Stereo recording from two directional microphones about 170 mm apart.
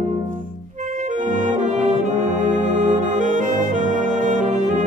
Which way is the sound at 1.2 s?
45° right (ahead or behind).